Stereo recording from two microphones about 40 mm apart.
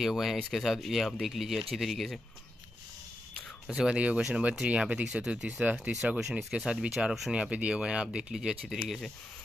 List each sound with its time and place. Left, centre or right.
0.0 s speech: centre
3.7 s speech: centre
4.0 s speech: right
5.0 s speech: centre
6.1 s speech: centre
7.5 s speech: right
8.6 s speech: centre